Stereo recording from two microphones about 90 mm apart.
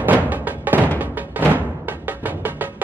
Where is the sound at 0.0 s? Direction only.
20° right (ahead or behind).